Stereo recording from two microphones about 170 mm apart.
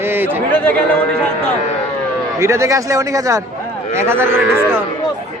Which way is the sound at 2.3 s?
20° right (ahead or behind).